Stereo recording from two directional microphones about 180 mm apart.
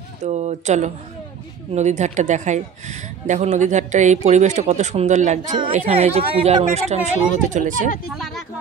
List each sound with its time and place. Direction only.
0.2 s speech: 40° right (ahead or behind)
8.1 s speech: centre (ahead or behind)